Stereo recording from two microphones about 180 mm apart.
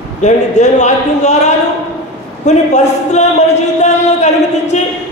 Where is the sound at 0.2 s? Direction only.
40° left (ahead or behind).